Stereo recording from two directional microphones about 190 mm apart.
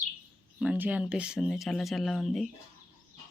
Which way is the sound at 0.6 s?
5° right (ahead or behind).